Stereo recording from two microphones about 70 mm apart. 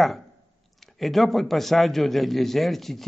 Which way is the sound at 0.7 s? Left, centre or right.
Centre.